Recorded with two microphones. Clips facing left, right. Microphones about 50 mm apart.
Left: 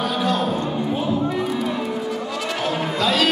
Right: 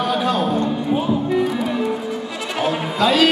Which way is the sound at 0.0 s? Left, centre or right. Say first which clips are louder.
Right 2 dB; centre.